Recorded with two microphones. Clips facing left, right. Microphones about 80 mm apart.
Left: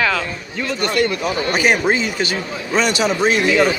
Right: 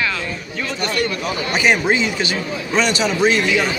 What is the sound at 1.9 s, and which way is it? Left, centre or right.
Speech, left.